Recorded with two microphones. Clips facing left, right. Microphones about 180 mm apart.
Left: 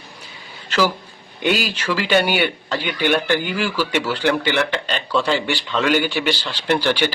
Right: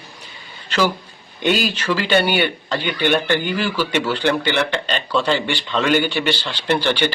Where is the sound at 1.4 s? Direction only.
10° left (ahead or behind).